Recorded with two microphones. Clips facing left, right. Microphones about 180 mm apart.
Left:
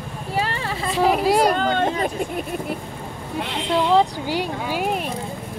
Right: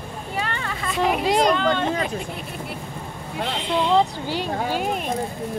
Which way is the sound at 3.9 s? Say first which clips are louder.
Left 2 dB; 10° left (ahead or behind).